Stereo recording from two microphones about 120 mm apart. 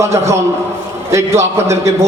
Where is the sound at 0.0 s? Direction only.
25° right (ahead or behind).